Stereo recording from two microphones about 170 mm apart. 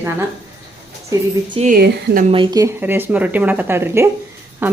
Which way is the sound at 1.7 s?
60° right (ahead or behind).